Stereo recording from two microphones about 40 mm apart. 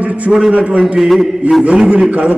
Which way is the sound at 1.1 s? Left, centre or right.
Centre.